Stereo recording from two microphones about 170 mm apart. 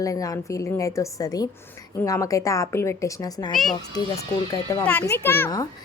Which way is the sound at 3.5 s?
Centre (ahead or behind).